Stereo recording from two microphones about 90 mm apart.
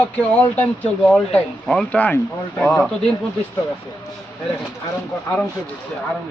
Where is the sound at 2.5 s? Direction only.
5° left (ahead or behind).